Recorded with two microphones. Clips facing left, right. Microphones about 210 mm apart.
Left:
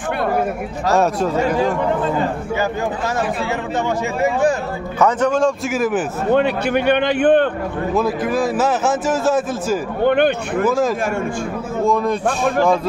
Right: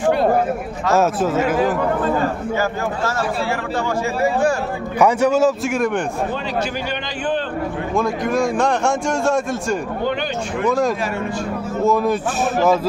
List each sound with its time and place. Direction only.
0.9 s a man's voice: centre (ahead or behind)
4.2 s speech: 20° left (ahead or behind)
4.9 s a man's voice: 10° right (ahead or behind)
6.3 s a man's voice: 60° left (ahead or behind)
7.9 s a man's voice: 5° left (ahead or behind)
10.0 s a man's voice: 55° left (ahead or behind)
10.6 s a man's voice: 5° left (ahead or behind)